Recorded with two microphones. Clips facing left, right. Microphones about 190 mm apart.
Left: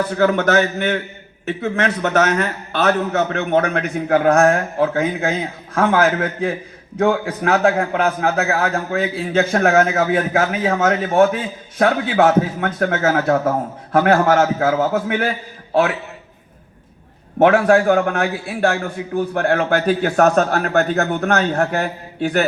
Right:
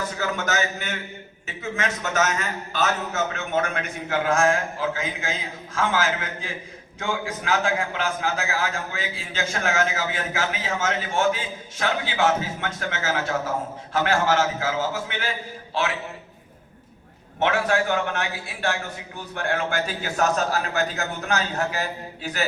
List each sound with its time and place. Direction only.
0.1 s a man's voice: 60° left (ahead or behind)
17.4 s a man's voice: 65° left (ahead or behind)
17.7 s a man's voice: 45° left (ahead or behind)